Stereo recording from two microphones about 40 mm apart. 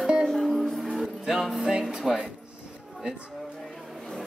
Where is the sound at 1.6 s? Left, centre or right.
Centre.